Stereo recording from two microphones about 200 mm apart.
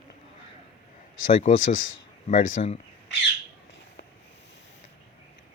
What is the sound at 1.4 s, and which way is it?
Speech, 40° left (ahead or behind).